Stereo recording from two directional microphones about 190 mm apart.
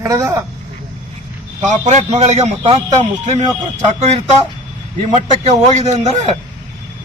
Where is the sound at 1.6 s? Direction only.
40° right (ahead or behind).